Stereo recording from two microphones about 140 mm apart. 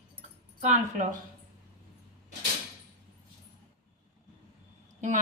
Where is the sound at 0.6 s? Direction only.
60° right (ahead or behind).